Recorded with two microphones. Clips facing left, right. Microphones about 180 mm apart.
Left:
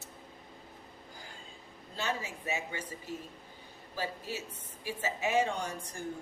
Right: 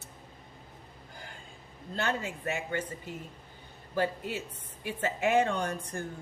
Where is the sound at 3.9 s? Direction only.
60° right (ahead or behind).